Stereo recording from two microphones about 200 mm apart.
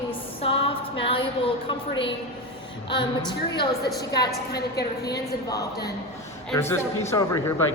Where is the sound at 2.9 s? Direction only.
25° left (ahead or behind).